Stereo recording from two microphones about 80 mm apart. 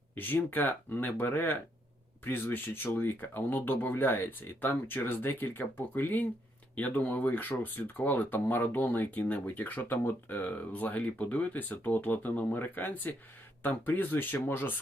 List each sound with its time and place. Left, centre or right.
0.2 s speech: left